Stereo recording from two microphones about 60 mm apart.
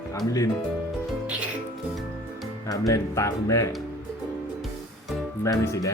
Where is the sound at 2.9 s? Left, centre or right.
Left.